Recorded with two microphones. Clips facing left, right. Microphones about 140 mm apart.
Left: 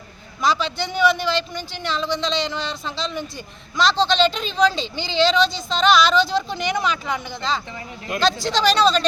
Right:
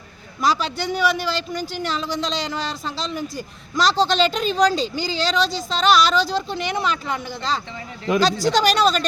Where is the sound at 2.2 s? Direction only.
40° right (ahead or behind).